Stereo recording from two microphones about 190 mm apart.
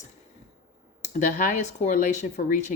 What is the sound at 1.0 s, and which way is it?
Speech, 40° left (ahead or behind).